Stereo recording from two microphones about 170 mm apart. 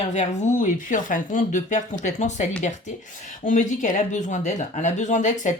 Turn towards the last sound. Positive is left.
turn(degrees=45)  # may be behind; listen again after turning